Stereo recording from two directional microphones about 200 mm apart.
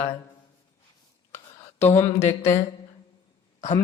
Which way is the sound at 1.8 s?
35° left (ahead or behind).